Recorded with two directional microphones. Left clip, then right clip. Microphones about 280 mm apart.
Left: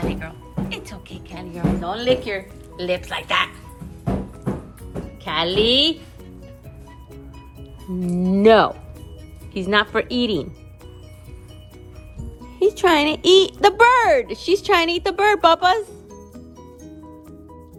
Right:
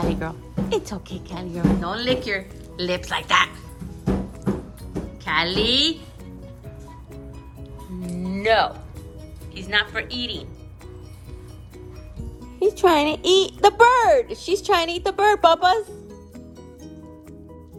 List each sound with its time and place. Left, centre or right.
0.1 s speech: centre
5.2 s speech: centre
8.1 s a woman's voice: centre
12.7 s speech: left